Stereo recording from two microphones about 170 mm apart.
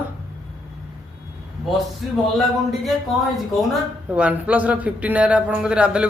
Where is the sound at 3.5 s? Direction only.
5° right (ahead or behind).